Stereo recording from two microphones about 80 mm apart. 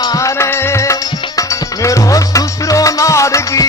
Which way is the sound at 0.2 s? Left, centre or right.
Left.